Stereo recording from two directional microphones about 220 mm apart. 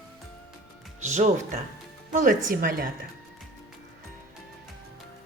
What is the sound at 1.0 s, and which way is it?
Speech, 30° right (ahead or behind).